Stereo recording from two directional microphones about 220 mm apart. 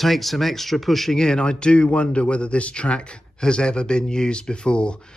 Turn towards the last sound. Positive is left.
turn(degrees=5)  # may be behind; listen again after turning